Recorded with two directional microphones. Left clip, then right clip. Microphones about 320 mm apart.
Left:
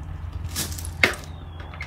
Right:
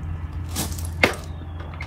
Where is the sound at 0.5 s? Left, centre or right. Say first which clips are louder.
Right 1 dB; centre.